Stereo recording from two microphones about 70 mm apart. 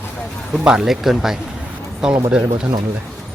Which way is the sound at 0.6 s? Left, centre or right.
Centre.